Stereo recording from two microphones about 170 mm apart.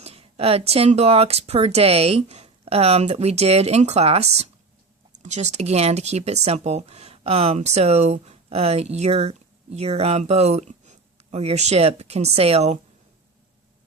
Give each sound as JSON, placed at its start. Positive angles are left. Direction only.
{"t": 0.0, "sound": "speech", "side_deg": -35}